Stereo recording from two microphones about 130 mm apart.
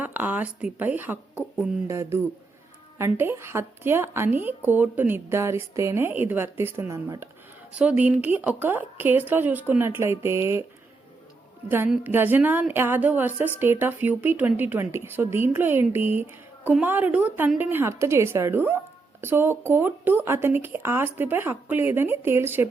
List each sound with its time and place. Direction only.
0.0 s a woman's voice: 15° right (ahead or behind)
1.9 s a woman's voice: 20° right (ahead or behind)
7.7 s a woman's voice: 10° right (ahead or behind)
12.0 s a woman's voice: 15° right (ahead or behind)